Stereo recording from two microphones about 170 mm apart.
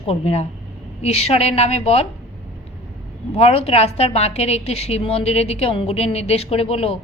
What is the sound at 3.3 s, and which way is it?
A woman's voice, 35° left (ahead or behind).